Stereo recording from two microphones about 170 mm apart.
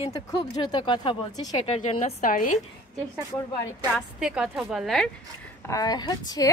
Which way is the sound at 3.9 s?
5° right (ahead or behind).